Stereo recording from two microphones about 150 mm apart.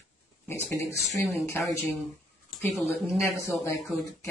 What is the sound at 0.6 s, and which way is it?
Speech, 20° left (ahead or behind).